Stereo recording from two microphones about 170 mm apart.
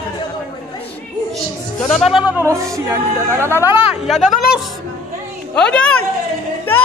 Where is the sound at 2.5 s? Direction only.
20° right (ahead or behind).